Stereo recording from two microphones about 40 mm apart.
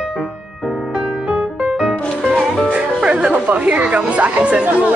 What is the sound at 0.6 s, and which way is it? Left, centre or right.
Music, centre.